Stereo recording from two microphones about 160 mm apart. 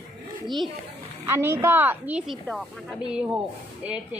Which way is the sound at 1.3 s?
15° right (ahead or behind).